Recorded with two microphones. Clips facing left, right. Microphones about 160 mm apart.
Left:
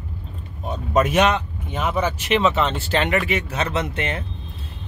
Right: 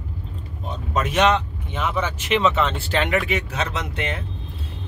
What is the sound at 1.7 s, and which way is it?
Speech, 40° left (ahead or behind).